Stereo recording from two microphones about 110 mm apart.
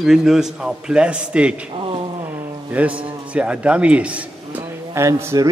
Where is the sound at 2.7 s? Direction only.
10° right (ahead or behind).